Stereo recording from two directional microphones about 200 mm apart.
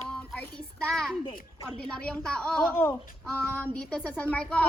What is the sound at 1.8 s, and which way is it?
A child's voice, 5° left (ahead or behind).